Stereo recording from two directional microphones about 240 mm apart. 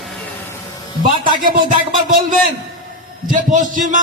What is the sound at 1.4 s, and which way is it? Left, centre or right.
A man's voice, right.